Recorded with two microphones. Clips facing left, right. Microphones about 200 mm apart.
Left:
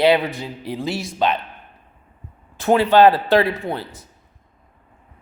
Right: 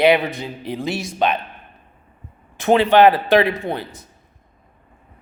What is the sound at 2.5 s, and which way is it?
Speech, 20° right (ahead or behind).